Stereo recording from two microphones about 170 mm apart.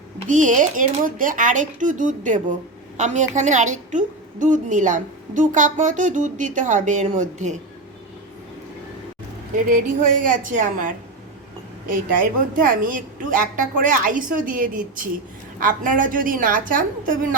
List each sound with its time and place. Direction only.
0.3 s a woman's voice: 50° right (ahead or behind)
9.6 s a woman's voice: 50° right (ahead or behind)
12.5 s a woman's voice: 55° right (ahead or behind)